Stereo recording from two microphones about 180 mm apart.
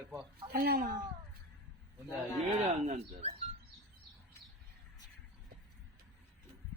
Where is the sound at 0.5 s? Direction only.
55° right (ahead or behind).